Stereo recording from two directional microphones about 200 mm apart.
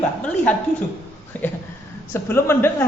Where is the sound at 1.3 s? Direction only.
10° left (ahead or behind).